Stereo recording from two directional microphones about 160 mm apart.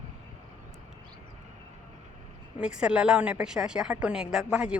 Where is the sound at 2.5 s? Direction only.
5° right (ahead or behind).